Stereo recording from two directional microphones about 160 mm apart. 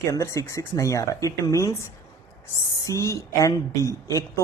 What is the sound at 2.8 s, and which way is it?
Speech, 20° left (ahead or behind).